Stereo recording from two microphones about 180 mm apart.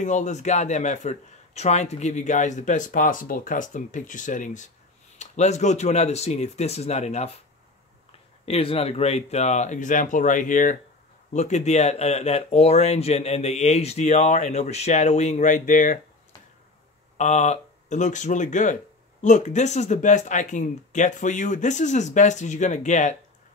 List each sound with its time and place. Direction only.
0.0 s speech: 40° left (ahead or behind)
8.5 s speech: 35° left (ahead or behind)
17.2 s speech: 40° left (ahead or behind)